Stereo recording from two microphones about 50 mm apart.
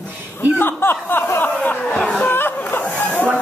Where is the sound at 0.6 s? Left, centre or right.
Left.